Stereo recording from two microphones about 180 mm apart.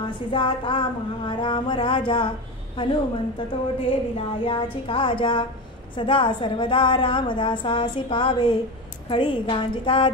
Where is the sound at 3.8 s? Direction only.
30° left (ahead or behind).